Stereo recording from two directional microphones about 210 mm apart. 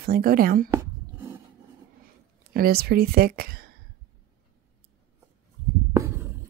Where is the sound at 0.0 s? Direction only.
45° right (ahead or behind).